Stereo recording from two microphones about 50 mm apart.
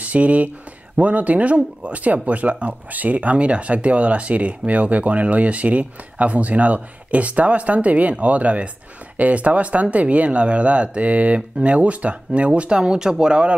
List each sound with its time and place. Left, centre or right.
0.0 s speech: right